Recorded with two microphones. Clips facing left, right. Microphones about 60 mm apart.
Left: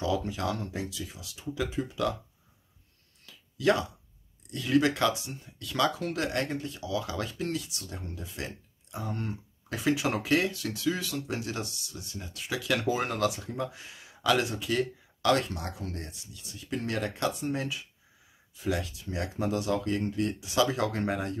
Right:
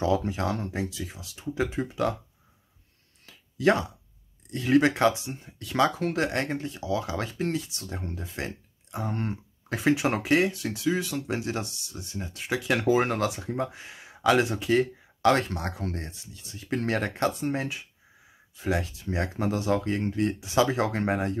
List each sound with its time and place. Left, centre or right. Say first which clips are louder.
0.0 s speech: right 4 dB; right
3.3 s a sound: right 3 dB; right
4.5 s speech: right 4 dB; right
16.6 s speech: right 4 dB; right